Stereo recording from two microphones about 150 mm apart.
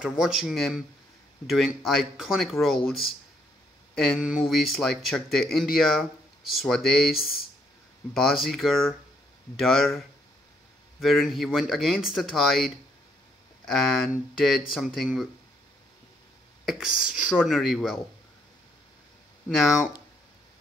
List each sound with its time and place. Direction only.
0.0 s speech: 5° right (ahead or behind)
13.7 s speech: centre (ahead or behind)
16.6 s speech: centre (ahead or behind)
19.6 s speech: 5° right (ahead or behind)